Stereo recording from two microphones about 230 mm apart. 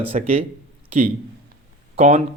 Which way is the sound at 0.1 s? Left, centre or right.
Right.